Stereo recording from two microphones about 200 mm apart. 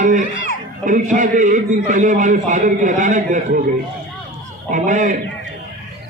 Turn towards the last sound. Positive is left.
turn(degrees=-40)  # may be behind; listen again after turning